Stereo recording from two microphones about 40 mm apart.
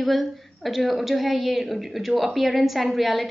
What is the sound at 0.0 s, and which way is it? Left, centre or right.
A woman's voice, centre.